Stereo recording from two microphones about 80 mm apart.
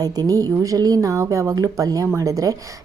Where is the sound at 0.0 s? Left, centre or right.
Right.